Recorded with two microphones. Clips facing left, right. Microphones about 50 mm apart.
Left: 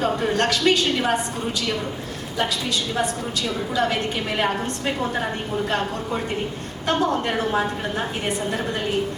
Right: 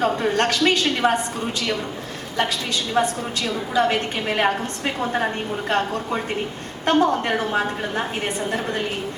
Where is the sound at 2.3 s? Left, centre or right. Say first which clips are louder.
Right 1 dB; right.